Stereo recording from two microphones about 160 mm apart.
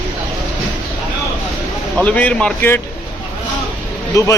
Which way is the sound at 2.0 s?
10° left (ahead or behind).